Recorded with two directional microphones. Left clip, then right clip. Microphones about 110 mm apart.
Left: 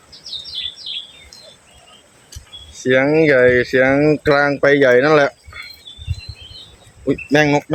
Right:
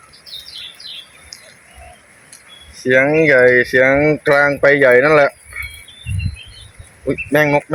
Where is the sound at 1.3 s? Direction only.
25° left (ahead or behind).